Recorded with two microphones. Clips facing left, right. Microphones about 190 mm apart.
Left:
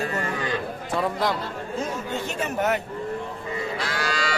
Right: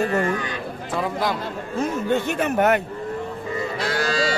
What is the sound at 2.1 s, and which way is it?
Speech, 60° right (ahead or behind).